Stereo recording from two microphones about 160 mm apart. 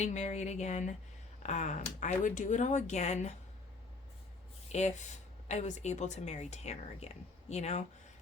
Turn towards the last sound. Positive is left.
turn(degrees=45)  # may be behind; listen again after turning